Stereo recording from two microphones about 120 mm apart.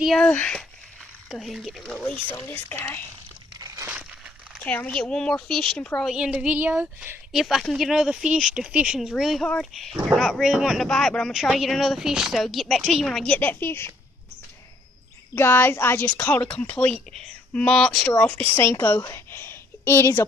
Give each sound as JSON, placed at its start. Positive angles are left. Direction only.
{"t": 0.0, "sound": "a woman's voice", "side_deg": 0}
{"t": 2.2, "sound": "a woman's voice", "side_deg": 15}
{"t": 3.5, "sound": "a sound", "side_deg": -25}
{"t": 4.6, "sound": "a woman's voice", "side_deg": 10}
{"t": 6.0, "sound": "a woman's voice", "side_deg": -5}
{"t": 7.3, "sound": "speech", "side_deg": 0}
{"t": 15.3, "sound": "a woman's voice", "side_deg": 20}
{"t": 18.2, "sound": "a woman's voice", "side_deg": 15}
{"t": 19.1, "sound": "a sound", "side_deg": 20}